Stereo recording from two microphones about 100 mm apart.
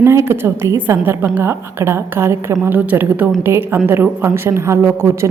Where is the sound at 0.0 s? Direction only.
25° right (ahead or behind).